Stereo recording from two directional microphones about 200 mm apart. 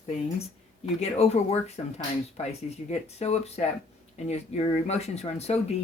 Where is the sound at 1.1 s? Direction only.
35° left (ahead or behind).